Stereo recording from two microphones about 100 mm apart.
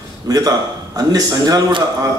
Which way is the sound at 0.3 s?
40° right (ahead or behind).